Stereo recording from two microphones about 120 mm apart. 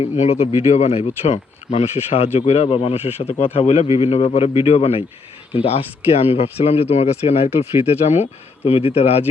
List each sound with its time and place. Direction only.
0.0 s speech: 70° left (ahead or behind)